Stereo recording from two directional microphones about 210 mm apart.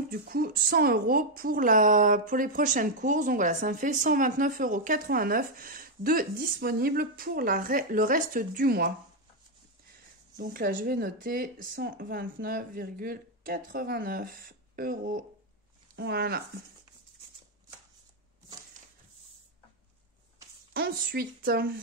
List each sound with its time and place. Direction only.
0.1 s a woman's voice: 45° right (ahead or behind)
10.3 s speech: 45° right (ahead or behind)
20.7 s speech: 45° right (ahead or behind)